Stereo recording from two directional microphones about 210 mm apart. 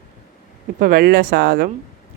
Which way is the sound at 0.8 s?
45° right (ahead or behind).